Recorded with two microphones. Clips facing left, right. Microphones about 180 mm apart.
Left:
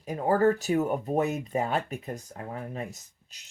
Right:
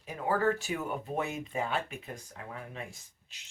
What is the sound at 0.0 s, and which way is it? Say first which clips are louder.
Speech: left 6 dB; 40° left (ahead or behind).